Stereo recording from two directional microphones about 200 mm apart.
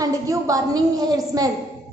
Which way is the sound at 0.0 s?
15° right (ahead or behind).